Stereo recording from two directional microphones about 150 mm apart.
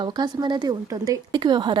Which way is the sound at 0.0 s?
30° right (ahead or behind).